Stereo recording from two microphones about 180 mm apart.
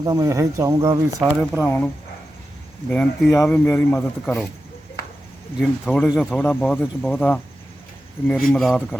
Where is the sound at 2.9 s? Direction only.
10° left (ahead or behind).